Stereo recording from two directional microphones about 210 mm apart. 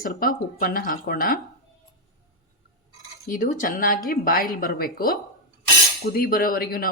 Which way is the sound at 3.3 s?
40° left (ahead or behind).